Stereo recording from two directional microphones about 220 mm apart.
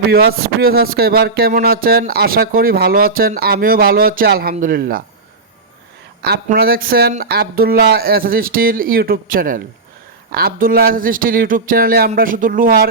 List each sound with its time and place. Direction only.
0.1 s speech: 45° right (ahead or behind)
6.2 s speech: 45° right (ahead or behind)